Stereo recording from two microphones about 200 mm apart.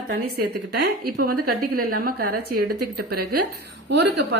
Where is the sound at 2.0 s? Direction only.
50° right (ahead or behind).